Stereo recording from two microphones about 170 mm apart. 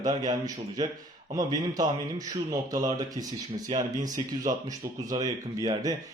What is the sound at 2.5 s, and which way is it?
Speech, 20° right (ahead or behind).